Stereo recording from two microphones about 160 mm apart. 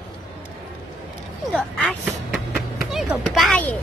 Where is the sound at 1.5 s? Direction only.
5° left (ahead or behind).